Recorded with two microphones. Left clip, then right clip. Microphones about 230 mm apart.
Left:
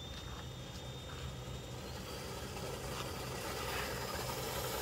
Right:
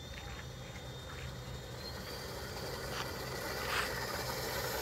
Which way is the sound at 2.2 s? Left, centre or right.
Centre.